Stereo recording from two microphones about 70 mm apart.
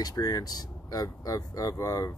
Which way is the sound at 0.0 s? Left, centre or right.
Left.